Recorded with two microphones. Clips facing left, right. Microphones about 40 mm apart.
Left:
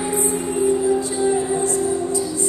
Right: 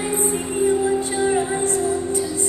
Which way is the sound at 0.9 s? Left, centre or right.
Right.